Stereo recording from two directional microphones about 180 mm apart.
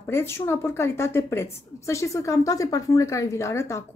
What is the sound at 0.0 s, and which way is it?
A woman's voice, 15° left (ahead or behind).